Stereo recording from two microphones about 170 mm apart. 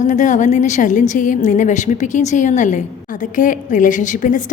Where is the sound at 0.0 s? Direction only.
45° left (ahead or behind).